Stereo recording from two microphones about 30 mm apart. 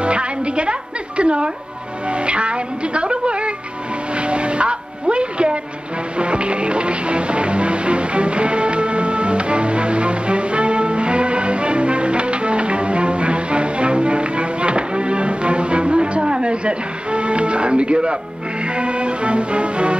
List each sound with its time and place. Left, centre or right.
0.0 s music: right
2.0 s speech: right
4.1 s train: right
6.1 s music: right
16.2 s music: right